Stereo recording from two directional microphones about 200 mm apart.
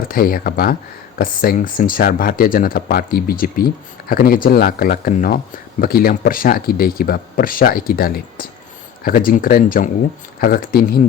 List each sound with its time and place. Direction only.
0.1 s speech: 45° left (ahead or behind)